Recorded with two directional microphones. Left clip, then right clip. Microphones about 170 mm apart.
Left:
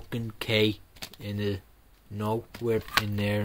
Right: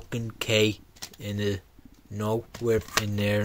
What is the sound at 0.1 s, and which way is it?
Speech, 15° right (ahead or behind).